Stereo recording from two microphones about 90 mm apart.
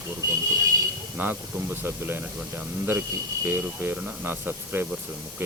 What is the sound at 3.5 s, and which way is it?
Speech, 25° right (ahead or behind).